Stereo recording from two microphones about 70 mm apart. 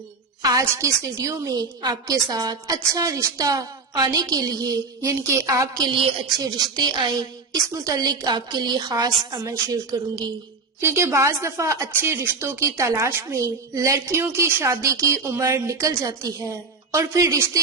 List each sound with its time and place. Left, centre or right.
0.6 s a woman's voice: right
1.5 s a woman's voice: right
2.1 s a woman's voice: right
5.0 s a woman's voice: right
6.4 s a woman's voice: right
9.3 s a woman's voice: right
10.8 s a woman's voice: right
11.9 s speech: right
13.4 s a woman's voice: right